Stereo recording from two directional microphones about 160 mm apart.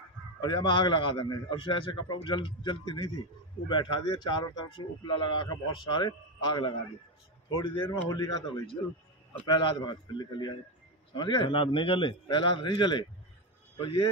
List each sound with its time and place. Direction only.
0.4 s a man's voice: 30° left (ahead or behind)